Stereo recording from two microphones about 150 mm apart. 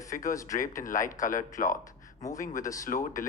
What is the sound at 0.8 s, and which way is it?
Speech, 60° left (ahead or behind).